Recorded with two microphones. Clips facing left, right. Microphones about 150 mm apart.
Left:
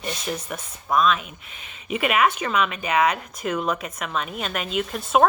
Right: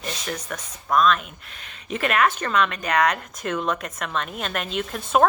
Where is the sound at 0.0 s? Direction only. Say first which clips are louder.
Left 2 dB; 10° left (ahead or behind).